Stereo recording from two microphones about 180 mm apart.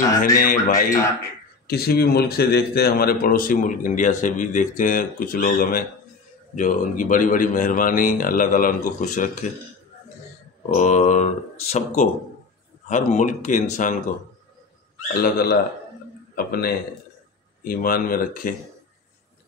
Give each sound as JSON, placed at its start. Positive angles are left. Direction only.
{"t": 0.4, "sound": "a man's voice", "side_deg": 50}
{"t": 1.7, "sound": "a man's voice", "side_deg": 60}
{"t": 10.7, "sound": "a man's voice", "side_deg": 40}
{"t": 15.2, "sound": "a man's voice", "side_deg": 60}